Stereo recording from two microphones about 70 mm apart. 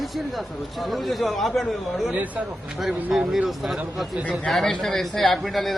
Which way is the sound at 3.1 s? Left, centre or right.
Centre.